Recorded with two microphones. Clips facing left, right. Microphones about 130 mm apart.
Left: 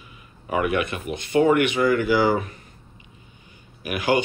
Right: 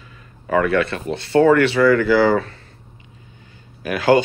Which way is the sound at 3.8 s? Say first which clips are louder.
Right 6 dB; 15° left (ahead or behind).